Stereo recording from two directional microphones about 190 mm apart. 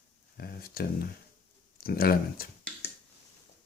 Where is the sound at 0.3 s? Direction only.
50° left (ahead or behind).